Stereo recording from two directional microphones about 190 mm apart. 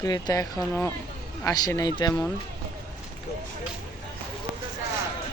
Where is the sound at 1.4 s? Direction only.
20° left (ahead or behind).